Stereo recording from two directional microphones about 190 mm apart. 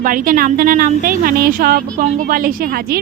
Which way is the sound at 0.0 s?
45° right (ahead or behind).